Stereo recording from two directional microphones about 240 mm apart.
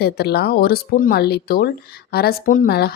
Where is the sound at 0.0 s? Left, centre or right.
Left.